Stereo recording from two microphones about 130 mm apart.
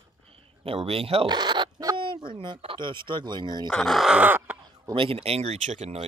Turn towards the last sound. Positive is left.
turn(degrees=-60)  # may be behind; listen again after turning